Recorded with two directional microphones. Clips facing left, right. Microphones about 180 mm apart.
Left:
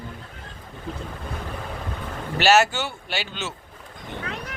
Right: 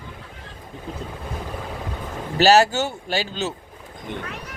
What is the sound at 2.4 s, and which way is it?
Speech, 35° right (ahead or behind).